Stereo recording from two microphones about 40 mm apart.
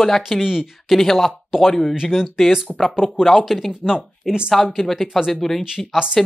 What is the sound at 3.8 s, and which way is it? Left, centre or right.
Speech, centre.